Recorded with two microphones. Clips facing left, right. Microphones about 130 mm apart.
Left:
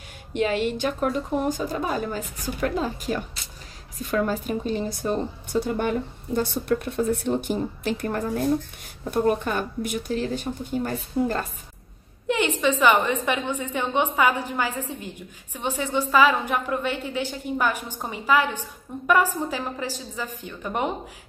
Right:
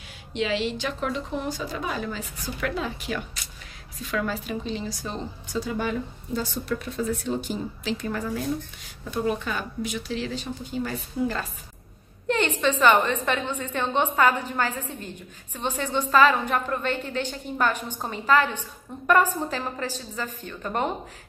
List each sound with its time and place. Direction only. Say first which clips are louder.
0.3 s a woman's voice: left 3 dB; 50° left (ahead or behind)
12.3 s a woman's voice: left 1 dB; 10° left (ahead or behind)